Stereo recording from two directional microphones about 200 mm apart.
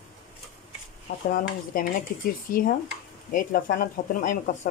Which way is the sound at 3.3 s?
45° left (ahead or behind).